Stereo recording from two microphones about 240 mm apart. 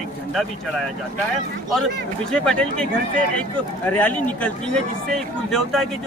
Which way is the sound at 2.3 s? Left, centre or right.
Centre.